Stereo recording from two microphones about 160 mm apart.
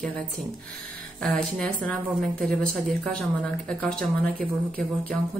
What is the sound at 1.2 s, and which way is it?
A woman's voice, 5° left (ahead or behind).